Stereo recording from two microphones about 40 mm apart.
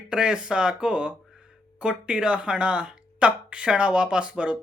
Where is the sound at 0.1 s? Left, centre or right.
Centre.